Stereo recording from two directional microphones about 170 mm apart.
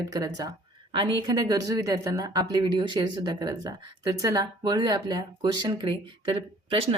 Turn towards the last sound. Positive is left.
turn(degrees=-35)  # may be behind; listen again after turning